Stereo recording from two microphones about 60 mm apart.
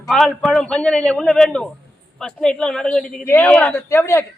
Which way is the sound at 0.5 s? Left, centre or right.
Centre.